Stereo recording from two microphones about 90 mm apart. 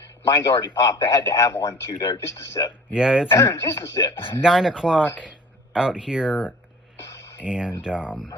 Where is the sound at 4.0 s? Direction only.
50° left (ahead or behind).